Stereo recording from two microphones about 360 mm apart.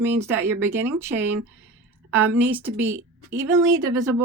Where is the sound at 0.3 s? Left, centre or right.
Centre.